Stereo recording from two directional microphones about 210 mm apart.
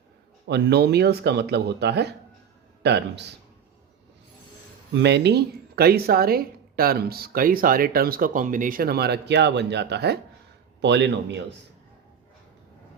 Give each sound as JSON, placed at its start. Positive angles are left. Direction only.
{"t": 0.4, "sound": "speech", "side_deg": -55}
{"t": 4.9, "sound": "a man's voice", "side_deg": -55}